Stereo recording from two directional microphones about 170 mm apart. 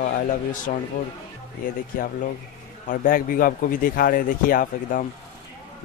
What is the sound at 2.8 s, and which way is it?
A man's voice, 55° left (ahead or behind).